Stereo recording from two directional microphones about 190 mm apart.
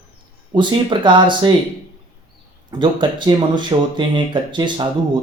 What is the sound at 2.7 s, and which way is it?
Speech, 25° right (ahead or behind).